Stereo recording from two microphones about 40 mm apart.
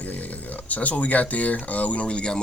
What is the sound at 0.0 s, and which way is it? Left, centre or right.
Speech, left.